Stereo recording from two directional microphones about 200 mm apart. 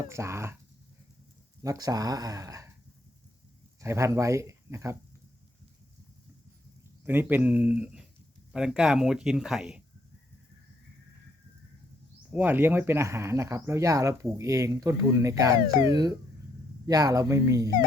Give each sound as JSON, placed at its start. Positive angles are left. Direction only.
{"t": 0.1, "sound": "speech", "side_deg": -15}
{"t": 1.6, "sound": "speech", "side_deg": -15}
{"t": 3.8, "sound": "speech", "side_deg": -15}
{"t": 7.0, "sound": "speech", "side_deg": -10}
{"t": 12.3, "sound": "speech", "side_deg": -10}